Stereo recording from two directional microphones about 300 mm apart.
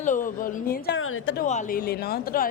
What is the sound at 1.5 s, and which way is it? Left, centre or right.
Speech, left.